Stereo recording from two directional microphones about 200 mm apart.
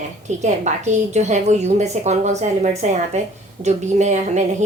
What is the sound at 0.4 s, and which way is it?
A woman's voice, 35° right (ahead or behind).